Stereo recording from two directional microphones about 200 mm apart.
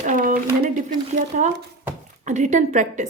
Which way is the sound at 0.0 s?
40° right (ahead or behind).